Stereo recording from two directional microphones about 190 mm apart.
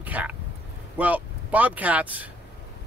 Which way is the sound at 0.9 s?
10° right (ahead or behind).